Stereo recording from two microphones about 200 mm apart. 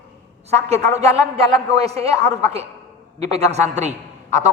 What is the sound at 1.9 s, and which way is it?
A man's voice, 30° right (ahead or behind).